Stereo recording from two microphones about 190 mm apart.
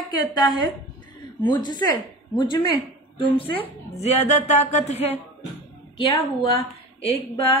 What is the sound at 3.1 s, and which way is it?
A woman's voice, 30° left (ahead or behind).